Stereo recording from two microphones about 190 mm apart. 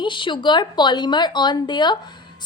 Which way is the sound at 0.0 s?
25° left (ahead or behind).